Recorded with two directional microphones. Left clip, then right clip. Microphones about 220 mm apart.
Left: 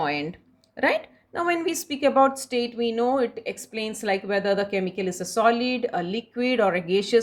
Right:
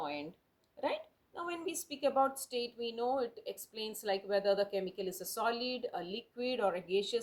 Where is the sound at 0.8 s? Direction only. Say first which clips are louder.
Left 14 dB; 30° left (ahead or behind).